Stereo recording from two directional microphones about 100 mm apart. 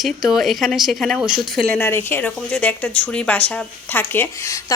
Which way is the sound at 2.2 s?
10° left (ahead or behind).